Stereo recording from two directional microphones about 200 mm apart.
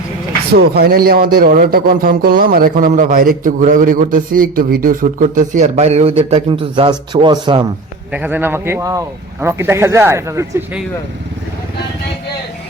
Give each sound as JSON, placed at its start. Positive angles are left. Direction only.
{"t": 0.5, "sound": "a man's voice", "side_deg": -50}
{"t": 8.1, "sound": "a man's voice", "side_deg": -10}